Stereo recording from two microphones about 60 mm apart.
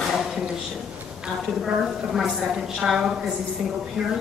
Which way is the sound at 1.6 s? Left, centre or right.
Centre.